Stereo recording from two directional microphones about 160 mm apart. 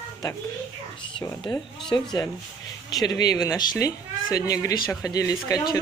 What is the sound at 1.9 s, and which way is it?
Speech, 20° left (ahead or behind).